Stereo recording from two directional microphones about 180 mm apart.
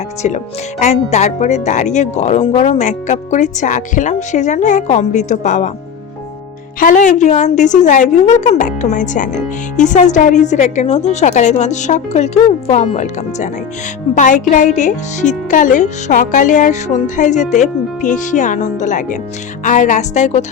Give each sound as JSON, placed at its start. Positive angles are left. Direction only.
{"t": 0.2, "sound": "a woman's voice", "side_deg": 40}
{"t": 6.7, "sound": "a woman's voice", "side_deg": 45}